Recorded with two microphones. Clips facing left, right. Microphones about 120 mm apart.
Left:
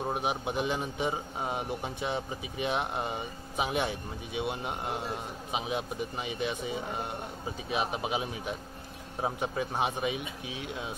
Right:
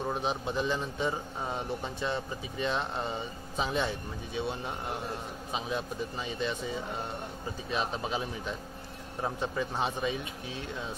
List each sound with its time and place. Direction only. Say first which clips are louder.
0.1 s a man's voice: even; 15° left (ahead or behind)